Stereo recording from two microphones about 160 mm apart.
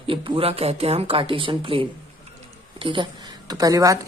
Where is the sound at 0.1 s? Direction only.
35° right (ahead or behind).